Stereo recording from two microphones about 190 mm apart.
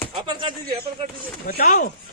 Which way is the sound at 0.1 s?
25° right (ahead or behind).